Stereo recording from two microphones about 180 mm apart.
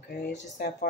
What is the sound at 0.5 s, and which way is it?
Speech, 60° left (ahead or behind).